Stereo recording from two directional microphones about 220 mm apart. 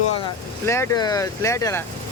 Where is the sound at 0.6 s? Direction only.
10° left (ahead or behind).